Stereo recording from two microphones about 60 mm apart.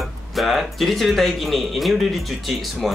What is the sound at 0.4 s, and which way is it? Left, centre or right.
Speech, centre.